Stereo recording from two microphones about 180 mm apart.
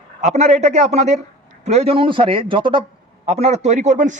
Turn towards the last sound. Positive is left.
turn(degrees=-45)  # may be behind; listen again after turning